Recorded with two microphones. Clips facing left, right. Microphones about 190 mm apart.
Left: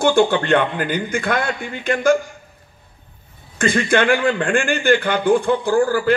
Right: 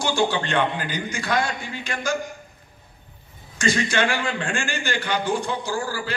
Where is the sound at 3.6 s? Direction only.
55° left (ahead or behind).